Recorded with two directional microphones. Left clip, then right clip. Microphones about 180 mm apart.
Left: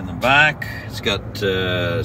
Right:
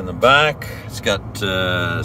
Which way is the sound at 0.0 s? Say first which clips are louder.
Right 1 dB; 15° right (ahead or behind).